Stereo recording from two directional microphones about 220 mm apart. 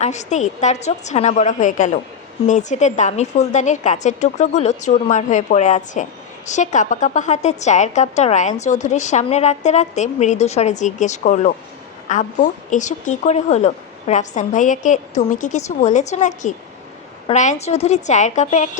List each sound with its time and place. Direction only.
0.0 s a woman's voice: 30° left (ahead or behind)